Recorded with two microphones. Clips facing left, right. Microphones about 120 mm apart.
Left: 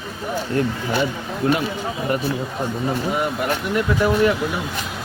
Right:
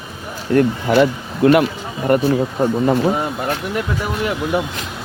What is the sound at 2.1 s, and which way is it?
Speech, 55° right (ahead or behind).